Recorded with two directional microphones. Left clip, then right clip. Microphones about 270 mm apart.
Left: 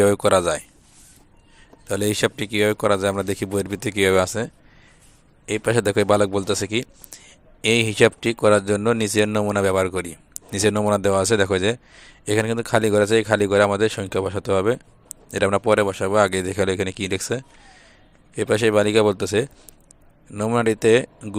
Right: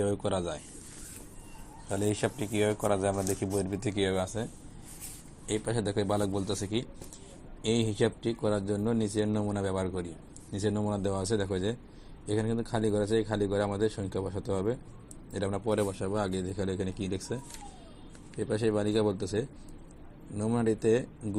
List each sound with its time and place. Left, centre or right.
0.0 s speech: left
1.9 s speech: left
5.5 s a man's voice: left
8.4 s speech: left